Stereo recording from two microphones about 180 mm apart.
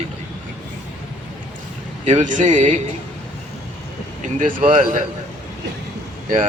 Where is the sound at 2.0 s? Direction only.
45° right (ahead or behind).